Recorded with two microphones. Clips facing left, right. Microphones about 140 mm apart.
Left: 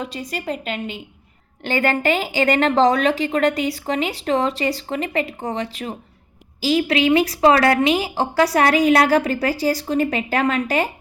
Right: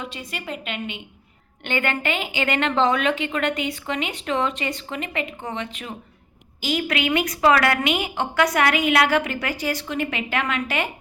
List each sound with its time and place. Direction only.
0.0 s a woman's voice: 40° left (ahead or behind)